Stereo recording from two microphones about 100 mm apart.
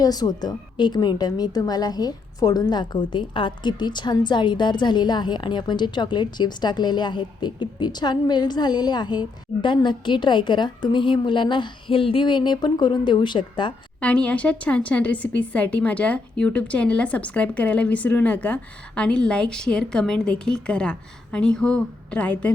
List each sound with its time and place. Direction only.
0.0 s a woman's voice: 40° left (ahead or behind)
14.0 s a woman's voice: 10° left (ahead or behind)